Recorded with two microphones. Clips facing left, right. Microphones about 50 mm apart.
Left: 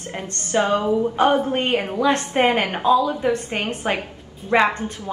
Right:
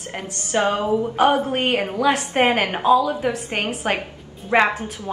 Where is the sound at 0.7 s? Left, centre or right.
Centre.